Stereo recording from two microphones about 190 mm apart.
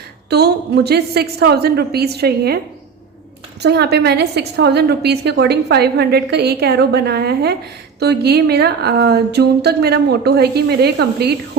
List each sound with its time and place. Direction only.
0.3 s a woman's voice: 60° right (ahead or behind)
3.6 s a woman's voice: 60° right (ahead or behind)